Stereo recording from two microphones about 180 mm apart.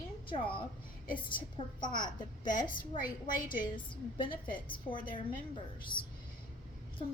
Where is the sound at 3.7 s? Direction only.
25° left (ahead or behind).